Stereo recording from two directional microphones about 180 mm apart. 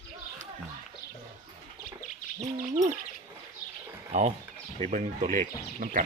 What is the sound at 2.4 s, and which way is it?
Speech, 40° right (ahead or behind).